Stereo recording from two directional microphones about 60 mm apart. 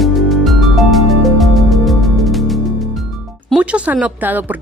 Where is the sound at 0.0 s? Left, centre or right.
Centre.